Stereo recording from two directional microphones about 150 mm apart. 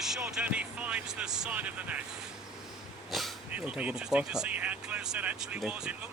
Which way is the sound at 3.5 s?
10° right (ahead or behind).